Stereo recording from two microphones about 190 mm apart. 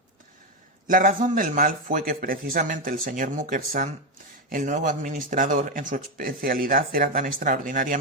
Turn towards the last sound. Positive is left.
turn(degrees=-45)  # may be behind; listen again after turning